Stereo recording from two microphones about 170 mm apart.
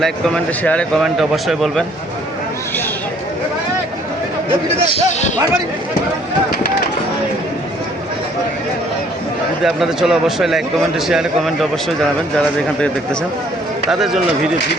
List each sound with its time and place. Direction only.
0.0 s a man's voice: 5° left (ahead or behind)
4.9 s speech: 40° left (ahead or behind)
9.6 s a man's voice: centre (ahead or behind)